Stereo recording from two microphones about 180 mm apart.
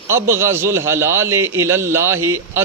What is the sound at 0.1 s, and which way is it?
Speech, 15° right (ahead or behind).